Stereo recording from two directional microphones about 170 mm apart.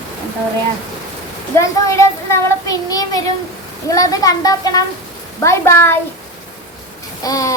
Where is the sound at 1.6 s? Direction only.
15° left (ahead or behind).